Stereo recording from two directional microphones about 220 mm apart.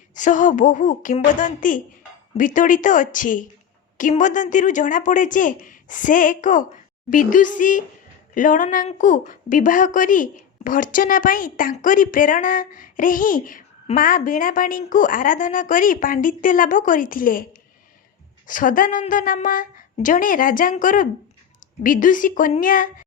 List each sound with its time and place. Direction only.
0.1 s a woman's voice: 35° left (ahead or behind)
18.4 s a woman's voice: 35° left (ahead or behind)